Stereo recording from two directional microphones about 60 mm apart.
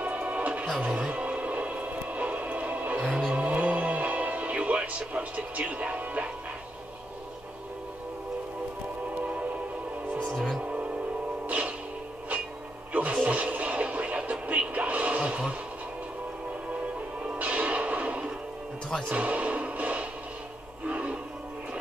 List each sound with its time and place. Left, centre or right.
0.0 s music: right
0.8 s a sound: right
3.3 s music: right
9.2 s music: right
10.2 s music: centre
10.6 s music: centre
12.9 s television: right
17.2 s music: right